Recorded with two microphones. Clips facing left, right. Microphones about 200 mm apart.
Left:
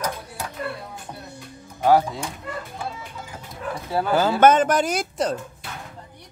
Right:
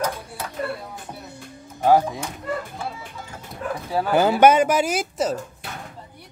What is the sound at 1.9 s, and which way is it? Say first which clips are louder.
Speech: even; 15° right (ahead or behind).